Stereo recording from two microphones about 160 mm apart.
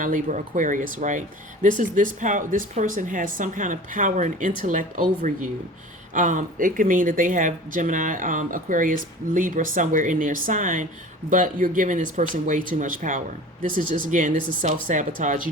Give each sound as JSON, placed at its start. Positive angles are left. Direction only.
{"t": 0.0, "sound": "speech", "side_deg": -55}